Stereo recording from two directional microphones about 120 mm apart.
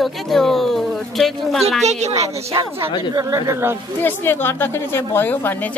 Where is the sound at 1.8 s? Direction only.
70° right (ahead or behind).